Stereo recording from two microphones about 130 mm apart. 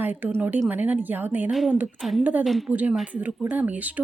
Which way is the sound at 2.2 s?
10° right (ahead or behind).